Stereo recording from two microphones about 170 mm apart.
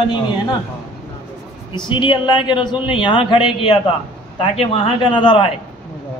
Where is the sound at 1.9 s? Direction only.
30° left (ahead or behind).